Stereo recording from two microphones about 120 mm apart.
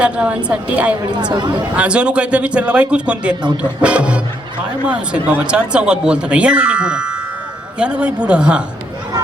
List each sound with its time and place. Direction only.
0.0 s speech: 10° right (ahead or behind)
1.1 s speech: 40° right (ahead or behind)
1.7 s speech: 10° right (ahead or behind)